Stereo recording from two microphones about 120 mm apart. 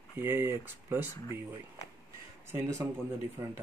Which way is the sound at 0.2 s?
20° right (ahead or behind).